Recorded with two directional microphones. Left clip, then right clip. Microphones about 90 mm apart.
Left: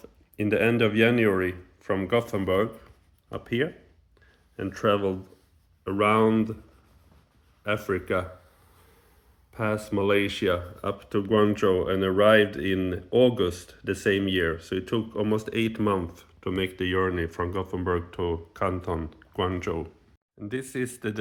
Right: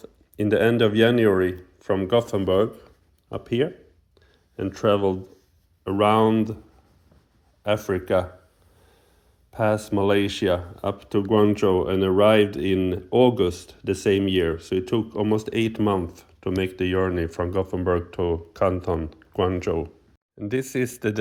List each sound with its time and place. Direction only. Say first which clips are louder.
0.0 s speech: right 4 dB; 30° right (ahead or behind)
5.8 s speech: right 3 dB; 55° right (ahead or behind)
7.6 s speech: right 4 dB; 55° right (ahead or behind)
9.5 s speech: right 6 dB; 55° right (ahead or behind); by 19.8 s 35° right (ahead or behind)
20.5 s speech: right 6 dB; 85° right